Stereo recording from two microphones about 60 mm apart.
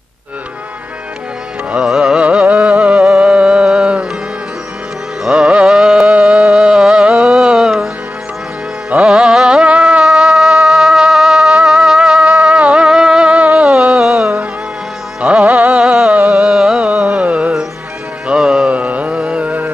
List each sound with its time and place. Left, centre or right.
1.8 s music: centre
2.1 s music: centre
5.2 s music: centre
5.7 s carnatic music: centre
6.1 s music: centre
8.9 s music: centre
13.9 s music: centre
18.7 s music: right